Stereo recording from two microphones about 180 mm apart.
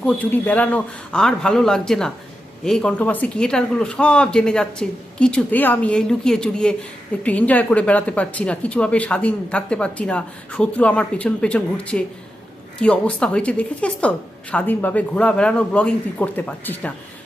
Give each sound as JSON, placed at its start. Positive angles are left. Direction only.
{"t": 0.0, "sound": "speech", "side_deg": 10}